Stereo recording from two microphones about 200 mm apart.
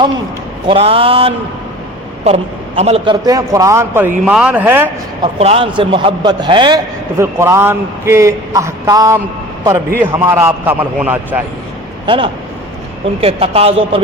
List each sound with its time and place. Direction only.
0.7 s a man's voice: 30° right (ahead or behind); by 4.9 s 10° right (ahead or behind)
5.2 s a man's voice: 30° right (ahead or behind); by 11.4 s 10° right (ahead or behind)
12.0 s a man's voice: 25° right (ahead or behind)